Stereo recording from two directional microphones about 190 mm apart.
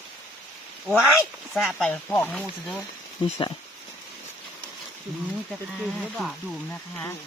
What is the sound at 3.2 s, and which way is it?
Speech, 25° left (ahead or behind).